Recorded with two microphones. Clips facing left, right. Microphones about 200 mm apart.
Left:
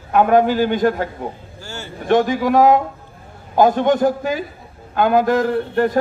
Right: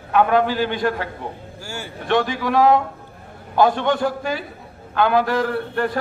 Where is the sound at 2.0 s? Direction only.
45° left (ahead or behind).